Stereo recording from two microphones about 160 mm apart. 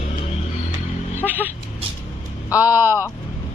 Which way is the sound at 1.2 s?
10° right (ahead or behind).